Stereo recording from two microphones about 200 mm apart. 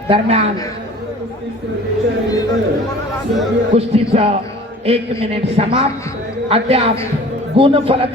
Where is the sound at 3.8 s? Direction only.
30° right (ahead or behind).